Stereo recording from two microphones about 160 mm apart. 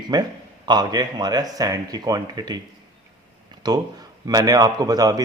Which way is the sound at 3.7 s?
25° right (ahead or behind).